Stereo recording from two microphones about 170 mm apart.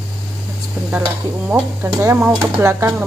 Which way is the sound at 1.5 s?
15° right (ahead or behind).